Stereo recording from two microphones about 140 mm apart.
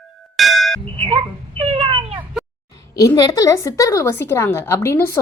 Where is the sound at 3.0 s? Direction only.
25° left (ahead or behind).